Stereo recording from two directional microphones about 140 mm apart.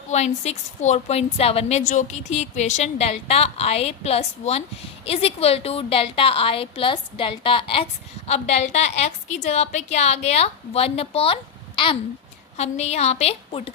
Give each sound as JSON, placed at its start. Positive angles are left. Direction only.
{"t": 0.1, "sound": "a woman's voice", "side_deg": 55}
{"t": 8.3, "sound": "a woman's voice", "side_deg": 50}
{"t": 12.5, "sound": "a woman's voice", "side_deg": 50}